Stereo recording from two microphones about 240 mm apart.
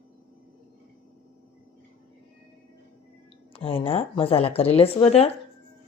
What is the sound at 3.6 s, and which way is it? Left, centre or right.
Speech, left.